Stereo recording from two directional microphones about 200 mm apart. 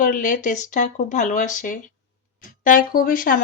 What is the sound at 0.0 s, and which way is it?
A woman's voice, 40° left (ahead or behind).